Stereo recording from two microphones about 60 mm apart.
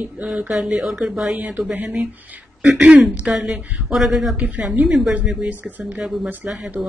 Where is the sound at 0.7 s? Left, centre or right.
Centre.